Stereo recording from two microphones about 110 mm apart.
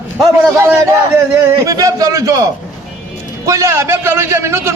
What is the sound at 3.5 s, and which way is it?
A man's voice, 25° right (ahead or behind).